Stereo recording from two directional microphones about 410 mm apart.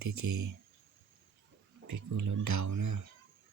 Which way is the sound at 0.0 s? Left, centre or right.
Right.